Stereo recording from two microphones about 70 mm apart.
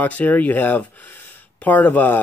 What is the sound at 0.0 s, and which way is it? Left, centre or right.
Speech, left.